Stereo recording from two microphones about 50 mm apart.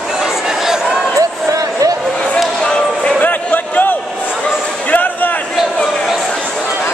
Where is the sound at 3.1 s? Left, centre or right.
Left.